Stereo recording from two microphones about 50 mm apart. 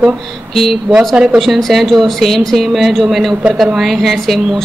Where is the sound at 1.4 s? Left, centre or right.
Centre.